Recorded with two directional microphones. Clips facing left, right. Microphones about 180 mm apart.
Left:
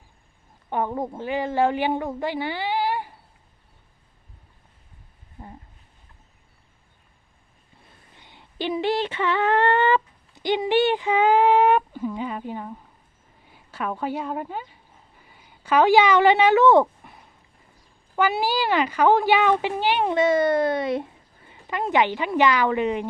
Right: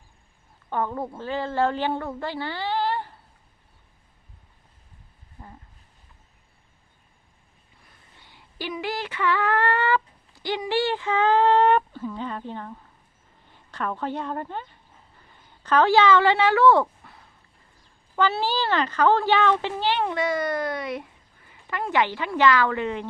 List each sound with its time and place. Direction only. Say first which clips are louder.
0.7 s a woman's voice: left 2 dB; 15° left (ahead or behind)
7.8 s female singing: left 3 dB; 20° left (ahead or behind)
13.5 s a woman's voice: left 1 dB; 10° left (ahead or behind)
15.2 s a sound: left 2 dB; 10° left (ahead or behind)
18.2 s speech: left 1 dB; 10° left (ahead or behind)